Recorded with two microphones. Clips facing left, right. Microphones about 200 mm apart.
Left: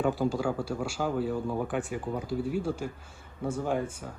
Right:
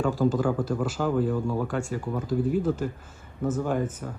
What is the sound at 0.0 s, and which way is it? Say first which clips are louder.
A man's voice: right 3 dB; 15° left (ahead or behind).